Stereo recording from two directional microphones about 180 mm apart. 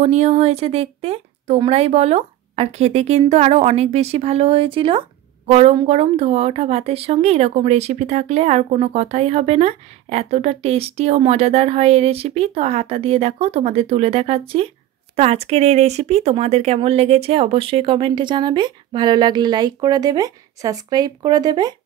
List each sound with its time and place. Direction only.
0.0 s speech: 40° right (ahead or behind); by 21.7 s 20° right (ahead or behind)